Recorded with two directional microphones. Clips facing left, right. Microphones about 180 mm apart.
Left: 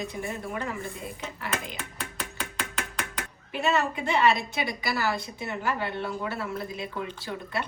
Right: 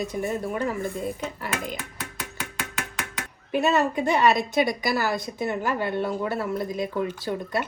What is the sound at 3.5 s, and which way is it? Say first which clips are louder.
A woman's voice: right 5 dB; 40° right (ahead or behind).